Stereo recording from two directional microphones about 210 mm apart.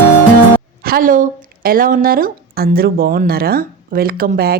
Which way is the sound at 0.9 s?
40° right (ahead or behind).